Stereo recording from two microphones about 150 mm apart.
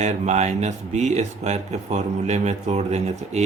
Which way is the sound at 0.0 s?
50° right (ahead or behind).